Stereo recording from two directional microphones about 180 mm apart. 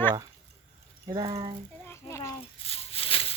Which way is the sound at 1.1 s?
25° right (ahead or behind).